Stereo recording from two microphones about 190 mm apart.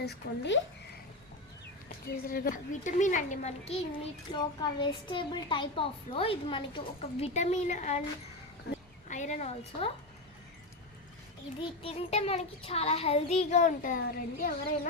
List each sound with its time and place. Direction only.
0.0 s speech: 65° left (ahead or behind)
2.2 s a child's voice: 50° left (ahead or behind)
9.0 s a woman's voice: 40° left (ahead or behind)
11.6 s a child's voice: 30° left (ahead or behind); by 14.5 s 50° left (ahead or behind)